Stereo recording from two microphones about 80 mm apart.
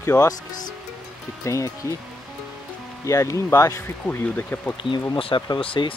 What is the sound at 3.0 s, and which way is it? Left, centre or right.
Speech, left.